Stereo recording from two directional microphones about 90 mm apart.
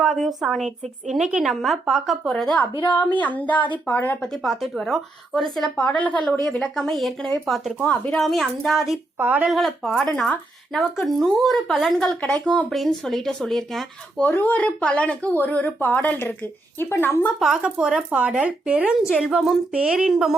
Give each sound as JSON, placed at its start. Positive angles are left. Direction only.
{"t": 0.0, "sound": "speech", "side_deg": 0}
{"t": 2.3, "sound": "a woman's voice", "side_deg": 10}
{"t": 4.2, "sound": "speech", "side_deg": 0}
{"t": 5.7, "sound": "a woman's voice", "side_deg": 15}
{"t": 6.6, "sound": "speech", "side_deg": 5}
{"t": 7.9, "sound": "a woman's voice", "side_deg": 15}
{"t": 8.2, "sound": "speech", "side_deg": 0}
{"t": 9.1, "sound": "speech", "side_deg": -20}
{"t": 9.5, "sound": "speech", "side_deg": 0}
{"t": 14.3, "sound": "speech", "side_deg": 20}
{"t": 17.4, "sound": "speech", "side_deg": -10}